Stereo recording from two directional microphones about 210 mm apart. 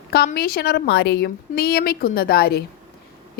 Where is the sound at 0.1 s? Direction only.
45° left (ahead or behind).